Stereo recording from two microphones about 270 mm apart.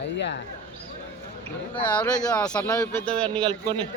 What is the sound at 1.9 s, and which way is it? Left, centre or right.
Speech, centre.